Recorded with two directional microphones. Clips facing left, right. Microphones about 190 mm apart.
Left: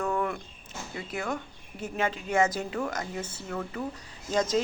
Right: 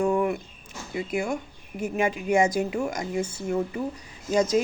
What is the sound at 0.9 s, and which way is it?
Speech, 10° right (ahead or behind).